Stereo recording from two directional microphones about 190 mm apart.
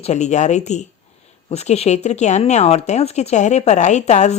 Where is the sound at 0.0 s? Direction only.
35° left (ahead or behind).